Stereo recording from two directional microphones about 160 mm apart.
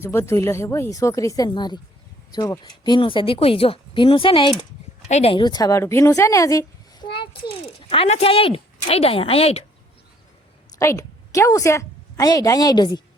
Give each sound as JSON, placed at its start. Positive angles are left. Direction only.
{"t": 0.0, "sound": "speech", "side_deg": 15}
{"t": 5.0, "sound": "speech", "side_deg": 40}
{"t": 10.8, "sound": "a woman's voice", "side_deg": 20}